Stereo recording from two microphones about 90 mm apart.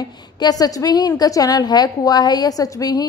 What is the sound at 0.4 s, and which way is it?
A woman's voice, 45° left (ahead or behind).